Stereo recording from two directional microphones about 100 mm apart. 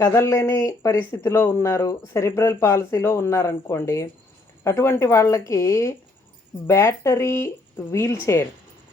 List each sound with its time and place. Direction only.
0.0 s speech: 30° left (ahead or behind)